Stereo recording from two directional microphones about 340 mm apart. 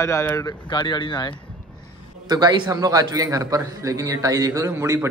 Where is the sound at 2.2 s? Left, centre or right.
Centre.